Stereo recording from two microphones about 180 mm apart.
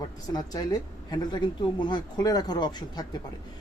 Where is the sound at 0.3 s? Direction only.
20° left (ahead or behind).